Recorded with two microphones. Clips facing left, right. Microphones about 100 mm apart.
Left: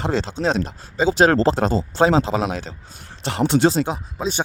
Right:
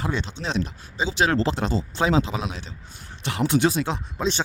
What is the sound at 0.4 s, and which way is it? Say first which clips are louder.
Speech: left 6 dB; 40° left (ahead or behind).